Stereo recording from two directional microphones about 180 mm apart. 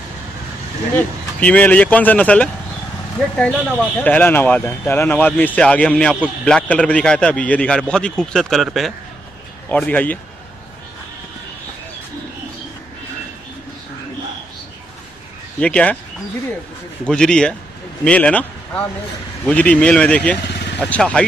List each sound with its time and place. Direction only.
0.9 s a man's voice: 10° left (ahead or behind)
15.6 s speech: 5° left (ahead or behind)
17.0 s a man's voice: 5° left (ahead or behind)